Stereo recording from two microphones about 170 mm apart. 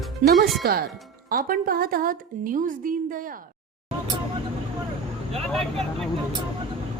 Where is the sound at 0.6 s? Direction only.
65° right (ahead or behind).